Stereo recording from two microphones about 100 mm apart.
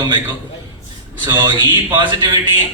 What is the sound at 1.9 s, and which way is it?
Speech, 50° right (ahead or behind).